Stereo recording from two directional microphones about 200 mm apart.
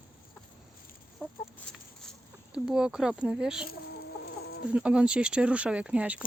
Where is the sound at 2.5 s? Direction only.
5° right (ahead or behind).